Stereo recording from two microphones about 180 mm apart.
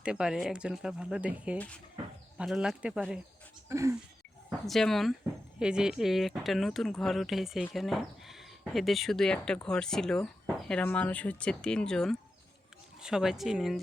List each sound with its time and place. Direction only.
0.0 s speech: 5° right (ahead or behind)
1.5 s speech: 5° left (ahead or behind)
3.7 s a sound: 15° right (ahead or behind)
4.6 s speech: centre (ahead or behind)